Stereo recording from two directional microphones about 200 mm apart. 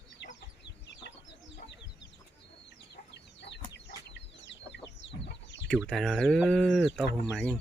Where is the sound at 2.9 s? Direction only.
55° left (ahead or behind).